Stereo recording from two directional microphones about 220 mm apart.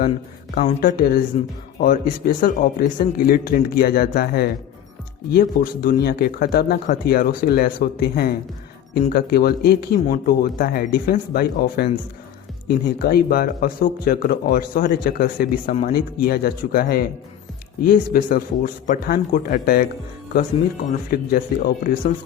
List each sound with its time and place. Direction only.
0.8 s speech: 40° left (ahead or behind)
21.1 s speech: 40° left (ahead or behind)